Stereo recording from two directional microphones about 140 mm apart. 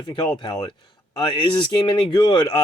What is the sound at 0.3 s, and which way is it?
Speech, 30° left (ahead or behind).